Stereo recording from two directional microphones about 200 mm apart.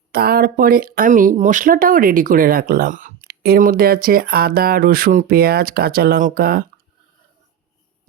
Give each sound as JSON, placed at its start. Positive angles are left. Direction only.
{"t": 0.1, "sound": "speech", "side_deg": -50}